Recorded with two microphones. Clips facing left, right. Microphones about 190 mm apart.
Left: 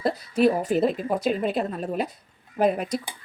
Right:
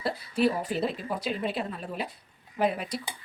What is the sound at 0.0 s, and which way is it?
A woman's voice, 40° left (ahead or behind).